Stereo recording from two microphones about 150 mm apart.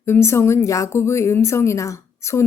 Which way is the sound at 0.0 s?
15° left (ahead or behind).